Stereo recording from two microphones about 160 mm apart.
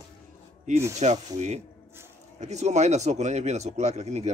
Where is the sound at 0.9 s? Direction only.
45° right (ahead or behind).